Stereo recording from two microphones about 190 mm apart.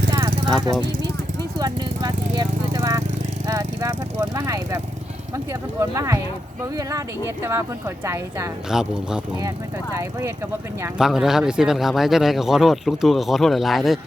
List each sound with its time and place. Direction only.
0.1 s vehicle: 20° right (ahead or behind)
1.5 s speech: 20° right (ahead or behind)
5.8 s speech: 15° right (ahead or behind)
8.7 s speech: 5° right (ahead or behind)
9.9 s speech: 15° right (ahead or behind)
10.9 s speech: centre (ahead or behind)